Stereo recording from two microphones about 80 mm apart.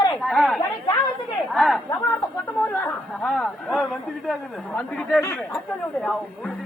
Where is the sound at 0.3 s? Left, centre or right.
Centre.